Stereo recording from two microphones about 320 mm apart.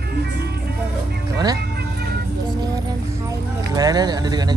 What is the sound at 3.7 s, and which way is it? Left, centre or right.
Speech, centre.